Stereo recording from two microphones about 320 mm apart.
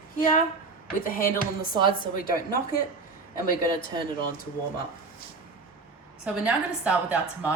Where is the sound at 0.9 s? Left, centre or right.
Left.